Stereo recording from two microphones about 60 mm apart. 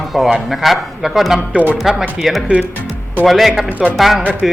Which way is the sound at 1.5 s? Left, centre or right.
Right.